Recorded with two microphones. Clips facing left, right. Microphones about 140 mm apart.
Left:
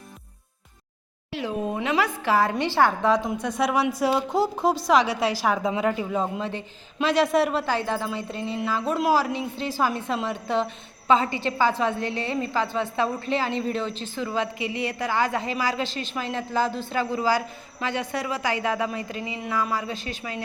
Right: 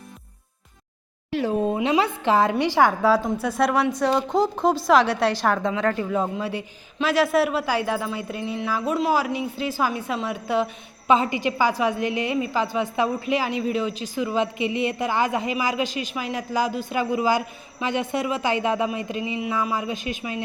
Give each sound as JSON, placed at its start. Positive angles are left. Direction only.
{"t": 1.3, "sound": "speech", "side_deg": -45}
{"t": 1.6, "sound": "a woman's voice", "side_deg": -25}
{"t": 6.4, "sound": "a woman's voice", "side_deg": -10}
{"t": 11.1, "sound": "a woman's voice", "side_deg": -15}